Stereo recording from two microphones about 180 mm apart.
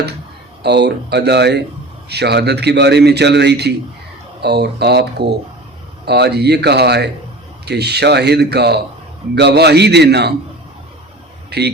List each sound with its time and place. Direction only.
0.6 s a man's voice: 70° right (ahead or behind)